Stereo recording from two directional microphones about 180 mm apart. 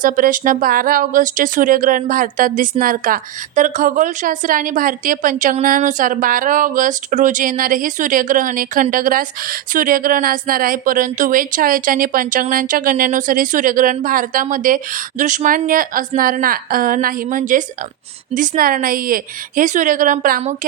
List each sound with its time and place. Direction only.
0.0 s speech: 50° right (ahead or behind)